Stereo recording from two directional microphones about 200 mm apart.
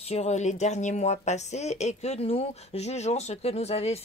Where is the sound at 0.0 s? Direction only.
30° left (ahead or behind).